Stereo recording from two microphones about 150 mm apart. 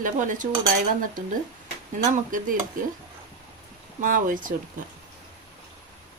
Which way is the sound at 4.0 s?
60° right (ahead or behind).